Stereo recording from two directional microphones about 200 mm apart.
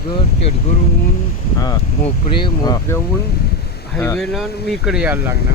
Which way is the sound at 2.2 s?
20° left (ahead or behind).